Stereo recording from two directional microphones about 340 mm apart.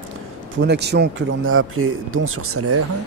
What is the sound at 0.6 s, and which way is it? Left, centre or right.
Speech, right.